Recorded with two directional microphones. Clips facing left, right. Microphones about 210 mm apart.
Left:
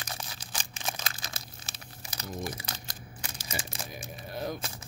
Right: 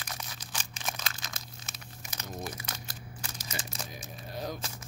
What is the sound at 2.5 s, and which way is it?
Speech, 35° left (ahead or behind).